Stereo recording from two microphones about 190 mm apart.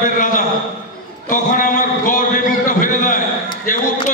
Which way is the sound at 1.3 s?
45° left (ahead or behind).